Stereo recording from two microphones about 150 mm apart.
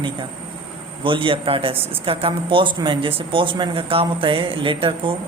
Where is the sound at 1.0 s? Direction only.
35° right (ahead or behind).